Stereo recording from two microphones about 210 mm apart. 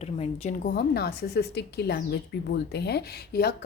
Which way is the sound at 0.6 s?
45° left (ahead or behind).